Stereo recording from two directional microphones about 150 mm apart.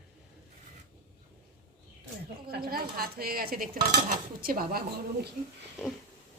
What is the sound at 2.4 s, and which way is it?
Speech, 90° right.